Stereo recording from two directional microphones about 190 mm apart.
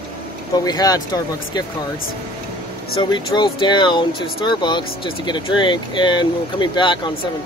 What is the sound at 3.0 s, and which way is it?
Speech, 25° left (ahead or behind).